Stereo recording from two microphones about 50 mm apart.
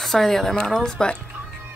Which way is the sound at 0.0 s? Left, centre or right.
Centre.